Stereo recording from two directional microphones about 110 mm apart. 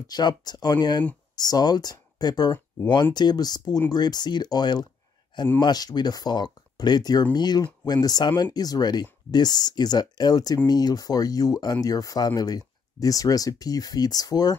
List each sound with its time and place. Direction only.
0.1 s speech: 40° left (ahead or behind)